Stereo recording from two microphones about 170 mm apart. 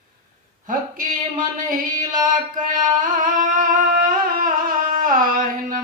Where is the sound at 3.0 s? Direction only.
50° right (ahead or behind).